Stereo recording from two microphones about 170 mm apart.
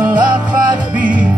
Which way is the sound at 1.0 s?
50° right (ahead or behind).